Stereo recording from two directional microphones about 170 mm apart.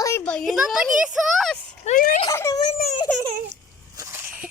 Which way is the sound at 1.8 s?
50° left (ahead or behind).